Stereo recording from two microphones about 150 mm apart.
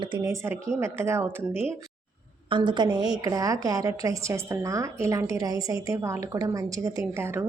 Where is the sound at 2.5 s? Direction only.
30° right (ahead or behind).